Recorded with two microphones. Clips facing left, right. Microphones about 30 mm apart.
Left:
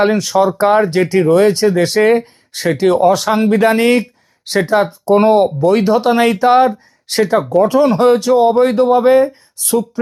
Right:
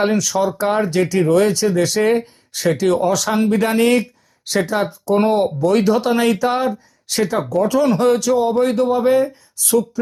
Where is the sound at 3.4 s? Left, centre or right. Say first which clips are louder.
Left 4 dB; left.